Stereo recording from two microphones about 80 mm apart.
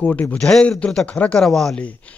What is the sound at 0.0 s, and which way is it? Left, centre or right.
A man's voice, centre.